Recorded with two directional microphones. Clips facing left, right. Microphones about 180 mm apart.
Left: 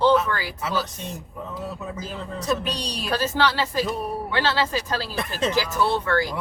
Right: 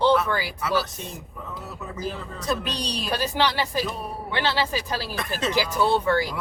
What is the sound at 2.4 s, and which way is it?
Speech, centre (ahead or behind).